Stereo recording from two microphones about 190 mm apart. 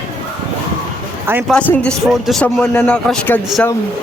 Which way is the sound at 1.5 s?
5° left (ahead or behind).